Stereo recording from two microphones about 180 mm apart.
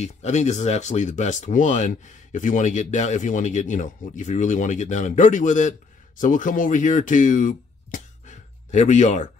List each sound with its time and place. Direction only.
0.0 s speech: 40° left (ahead or behind)